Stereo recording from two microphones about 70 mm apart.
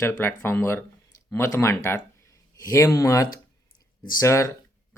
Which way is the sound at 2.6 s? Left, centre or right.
Left.